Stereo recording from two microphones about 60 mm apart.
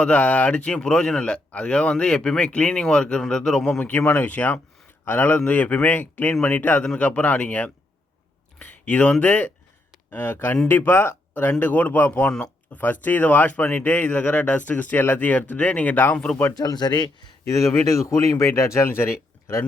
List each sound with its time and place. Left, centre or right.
0.0 s speech: left
3.7 s speech: left
4.3 s speech: left
8.5 s a sound: left
9.2 s speech: left
10.1 s speech: left
11.6 s speech: left
16.1 s speech: centre
17.4 s speech: left